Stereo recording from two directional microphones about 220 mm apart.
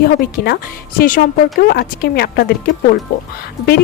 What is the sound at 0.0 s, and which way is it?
Speech, 45° left (ahead or behind).